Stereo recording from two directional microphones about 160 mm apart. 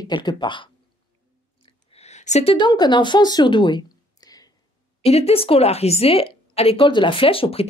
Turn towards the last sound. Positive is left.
turn(degrees=35)  # may be behind; listen again after turning